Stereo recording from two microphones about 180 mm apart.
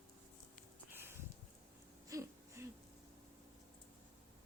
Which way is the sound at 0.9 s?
15° right (ahead or behind).